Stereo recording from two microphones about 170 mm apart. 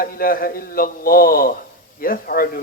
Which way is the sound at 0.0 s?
55° left (ahead or behind).